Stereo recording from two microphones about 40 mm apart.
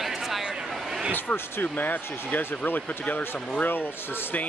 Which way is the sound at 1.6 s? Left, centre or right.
Left.